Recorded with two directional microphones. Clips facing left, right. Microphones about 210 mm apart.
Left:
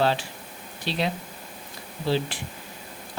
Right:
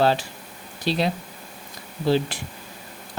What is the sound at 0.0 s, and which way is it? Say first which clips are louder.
Speech: right 3 dB; 40° right (ahead or behind).